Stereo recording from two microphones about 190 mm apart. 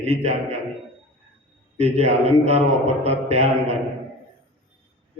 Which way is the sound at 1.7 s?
35° right (ahead or behind).